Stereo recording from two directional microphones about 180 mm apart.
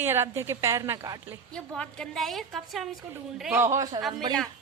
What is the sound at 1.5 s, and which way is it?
A woman's voice, 5° left (ahead or behind).